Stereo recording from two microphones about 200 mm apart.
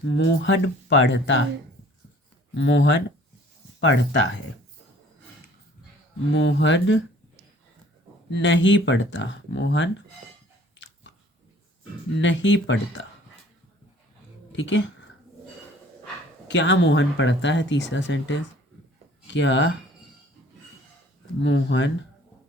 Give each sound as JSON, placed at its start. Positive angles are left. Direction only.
{"t": 0.2, "sound": "speech", "side_deg": 65}
{"t": 2.6, "sound": "speech", "side_deg": 65}
{"t": 6.3, "sound": "speech", "side_deg": 65}
{"t": 8.3, "sound": "speech", "side_deg": 65}
{"t": 11.1, "sound": "biting", "side_deg": 65}
{"t": 12.2, "sound": "speech", "side_deg": 65}
{"t": 14.5, "sound": "speech", "side_deg": 65}
{"t": 16.5, "sound": "speech", "side_deg": 65}
{"t": 21.4, "sound": "speech", "side_deg": 65}